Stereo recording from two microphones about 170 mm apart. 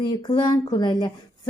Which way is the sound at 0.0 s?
25° left (ahead or behind).